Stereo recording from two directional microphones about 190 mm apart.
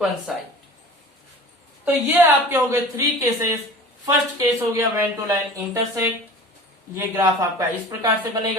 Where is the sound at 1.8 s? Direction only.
10° right (ahead or behind).